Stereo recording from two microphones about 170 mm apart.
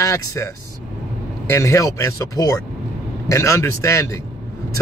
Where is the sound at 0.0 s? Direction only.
15° left (ahead or behind).